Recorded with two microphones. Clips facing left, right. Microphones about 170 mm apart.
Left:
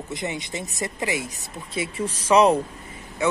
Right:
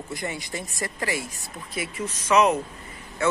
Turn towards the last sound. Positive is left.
turn(degrees=15)  # may be behind; listen again after turning